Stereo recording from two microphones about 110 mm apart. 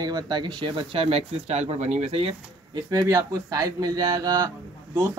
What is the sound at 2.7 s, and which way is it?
A man's voice, 35° right (ahead or behind).